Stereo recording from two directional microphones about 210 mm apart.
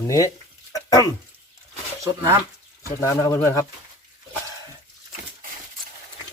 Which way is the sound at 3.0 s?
15° left (ahead or behind).